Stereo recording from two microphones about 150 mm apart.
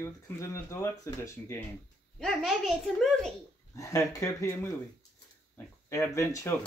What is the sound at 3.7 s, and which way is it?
Speech, 20° left (ahead or behind).